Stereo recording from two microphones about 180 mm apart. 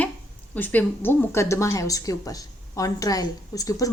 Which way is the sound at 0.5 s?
10° left (ahead or behind).